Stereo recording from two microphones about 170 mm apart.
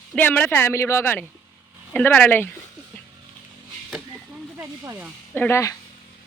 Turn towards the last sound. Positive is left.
turn(degrees=15)  # may be behind; listen again after turning